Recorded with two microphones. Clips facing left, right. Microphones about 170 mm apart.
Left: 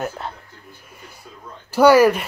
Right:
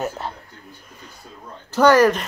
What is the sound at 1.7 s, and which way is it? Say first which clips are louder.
Speech: left 2 dB; 10° left (ahead or behind).